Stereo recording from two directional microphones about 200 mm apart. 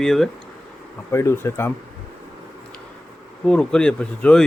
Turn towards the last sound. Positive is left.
turn(degrees=5)  # may be behind; listen again after turning